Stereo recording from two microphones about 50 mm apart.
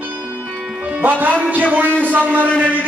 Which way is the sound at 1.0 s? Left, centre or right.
Right.